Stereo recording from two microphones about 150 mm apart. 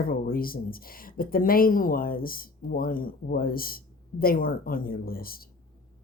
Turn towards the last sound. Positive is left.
turn(degrees=80)